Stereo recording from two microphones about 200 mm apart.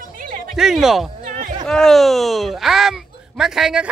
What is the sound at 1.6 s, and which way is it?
Speech, centre (ahead or behind).